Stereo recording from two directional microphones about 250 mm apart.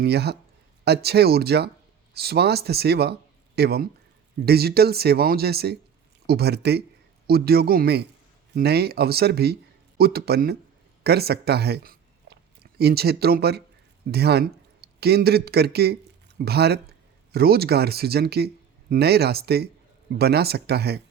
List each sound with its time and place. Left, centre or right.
0.0 s speech: right